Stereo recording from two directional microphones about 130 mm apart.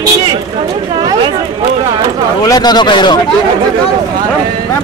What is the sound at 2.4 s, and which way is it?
Speech, 30° left (ahead or behind).